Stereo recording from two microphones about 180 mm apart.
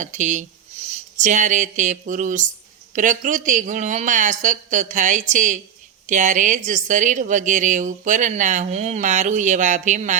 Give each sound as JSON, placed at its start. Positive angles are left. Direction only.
{"t": 0.0, "sound": "a woman's voice", "side_deg": -45}